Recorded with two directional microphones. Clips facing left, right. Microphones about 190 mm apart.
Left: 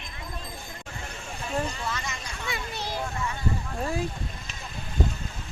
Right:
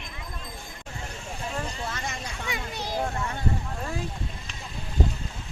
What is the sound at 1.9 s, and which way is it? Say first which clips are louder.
Vehicle: right 1 dB; 55° right (ahead or behind).